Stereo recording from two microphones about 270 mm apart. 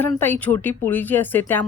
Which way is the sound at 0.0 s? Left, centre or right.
Centre.